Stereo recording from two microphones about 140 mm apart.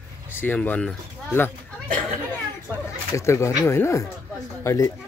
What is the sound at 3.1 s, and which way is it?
Speech, 20° left (ahead or behind).